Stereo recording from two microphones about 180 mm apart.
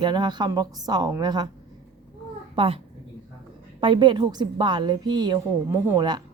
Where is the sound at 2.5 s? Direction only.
30° right (ahead or behind).